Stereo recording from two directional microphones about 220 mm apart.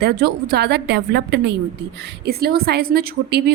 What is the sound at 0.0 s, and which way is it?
A woman's voice, 45° right (ahead or behind).